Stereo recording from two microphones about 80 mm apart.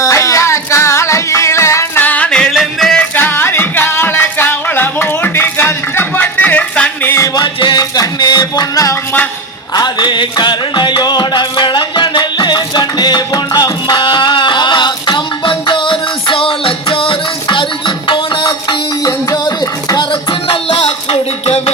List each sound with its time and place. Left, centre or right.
0.0 s music: left
2.0 s music: centre
2.5 s music: centre
3.0 s music: left
6.1 s music: centre
7.3 s music: left
9.7 s music: left
19.0 s music: left